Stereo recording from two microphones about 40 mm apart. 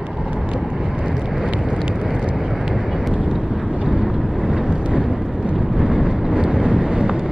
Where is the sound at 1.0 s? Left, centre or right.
Centre.